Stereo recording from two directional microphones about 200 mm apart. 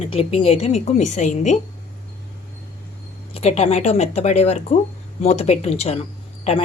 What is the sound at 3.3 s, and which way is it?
A woman's voice, 30° left (ahead or behind).